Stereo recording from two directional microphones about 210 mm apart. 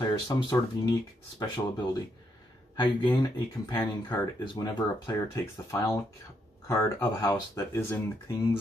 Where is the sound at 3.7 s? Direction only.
20° left (ahead or behind).